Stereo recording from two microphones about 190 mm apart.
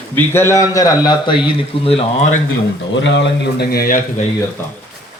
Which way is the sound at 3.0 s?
70° left (ahead or behind).